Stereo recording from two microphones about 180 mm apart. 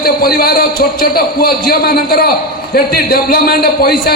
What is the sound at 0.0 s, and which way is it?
A man's voice, 55° left (ahead or behind).